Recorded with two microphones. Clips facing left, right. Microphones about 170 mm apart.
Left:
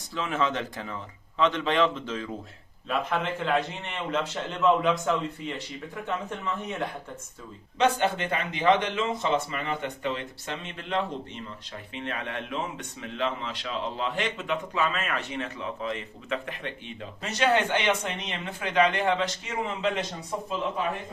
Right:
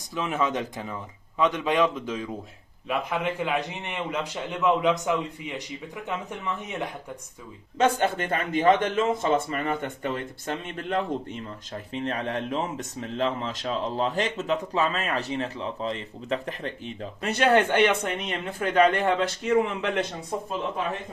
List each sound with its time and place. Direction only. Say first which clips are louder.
0.1 s a man's voice: right 1 dB; 15° right (ahead or behind)
7.8 s a man's voice: right 1 dB; 45° right (ahead or behind)
17.2 s speech: right 3 dB; 55° right (ahead or behind)